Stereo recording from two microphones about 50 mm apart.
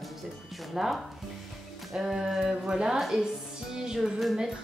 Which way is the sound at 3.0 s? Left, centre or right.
Centre.